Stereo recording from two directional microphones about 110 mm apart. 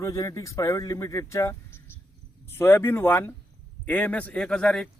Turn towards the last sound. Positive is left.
turn(degrees=5)  # may be behind; listen again after turning